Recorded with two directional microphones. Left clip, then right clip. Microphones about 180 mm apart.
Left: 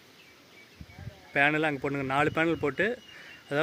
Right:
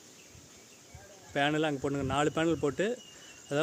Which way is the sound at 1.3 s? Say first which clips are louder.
Left 4 dB; 5° left (ahead or behind).